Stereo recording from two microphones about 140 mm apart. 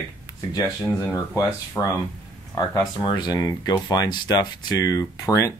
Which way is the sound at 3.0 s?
30° left (ahead or behind).